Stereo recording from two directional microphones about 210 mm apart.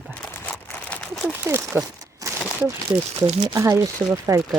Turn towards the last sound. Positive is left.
turn(degrees=-15)  # may be behind; listen again after turning